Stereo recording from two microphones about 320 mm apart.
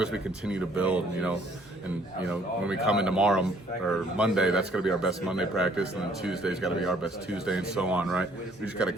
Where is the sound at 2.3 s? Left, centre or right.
Centre.